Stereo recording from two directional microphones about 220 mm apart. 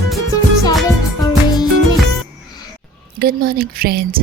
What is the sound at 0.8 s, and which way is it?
Music, 15° left (ahead or behind).